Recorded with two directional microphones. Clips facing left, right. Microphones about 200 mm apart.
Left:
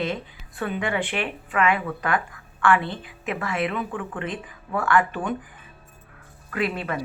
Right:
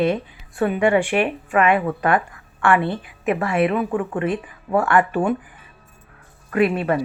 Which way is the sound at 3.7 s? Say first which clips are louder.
Right 8 dB; 45° right (ahead or behind).